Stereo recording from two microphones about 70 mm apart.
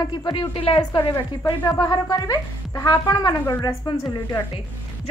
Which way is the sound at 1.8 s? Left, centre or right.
Left.